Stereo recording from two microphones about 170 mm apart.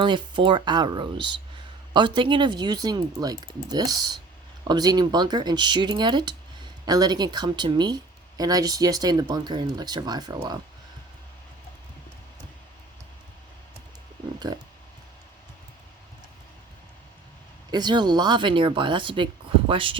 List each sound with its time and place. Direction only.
0.0 s speech: 30° right (ahead or behind)
14.3 s speech: 25° right (ahead or behind)
17.7 s speech: 25° right (ahead or behind)